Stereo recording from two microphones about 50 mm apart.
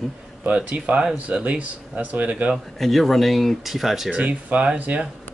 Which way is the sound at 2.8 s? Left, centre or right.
Centre.